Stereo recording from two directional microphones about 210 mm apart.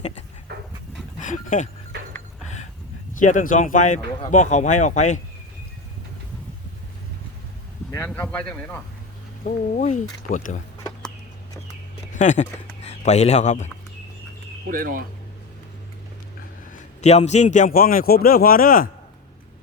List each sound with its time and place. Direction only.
1.2 s dog: 35° left (ahead or behind)
2.4 s a sound: 35° left (ahead or behind)
3.2 s a man's voice: 40° left (ahead or behind)
7.9 s speech: 10° left (ahead or behind)
9.5 s a man's voice: 35° left (ahead or behind)
12.1 s speech: 35° left (ahead or behind)
14.7 s speech: 40° right (ahead or behind)
16.7 s a man's voice: 30° left (ahead or behind)